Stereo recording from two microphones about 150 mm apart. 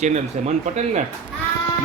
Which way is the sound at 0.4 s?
55° right (ahead or behind).